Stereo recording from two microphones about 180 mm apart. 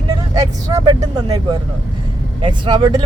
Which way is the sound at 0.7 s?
20° right (ahead or behind).